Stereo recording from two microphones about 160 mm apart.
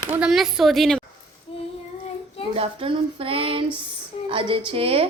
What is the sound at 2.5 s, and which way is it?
A woman's voice, 35° right (ahead or behind).